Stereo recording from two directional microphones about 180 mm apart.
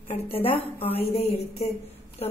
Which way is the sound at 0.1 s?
30° left (ahead or behind).